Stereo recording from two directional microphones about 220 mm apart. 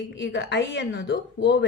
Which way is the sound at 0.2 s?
55° left (ahead or behind).